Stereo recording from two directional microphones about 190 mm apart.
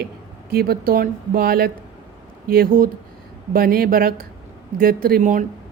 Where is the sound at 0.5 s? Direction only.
55° right (ahead or behind).